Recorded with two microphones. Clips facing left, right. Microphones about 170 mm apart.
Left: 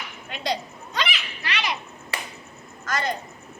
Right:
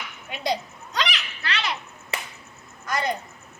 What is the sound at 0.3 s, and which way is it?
Speech, 10° right (ahead or behind).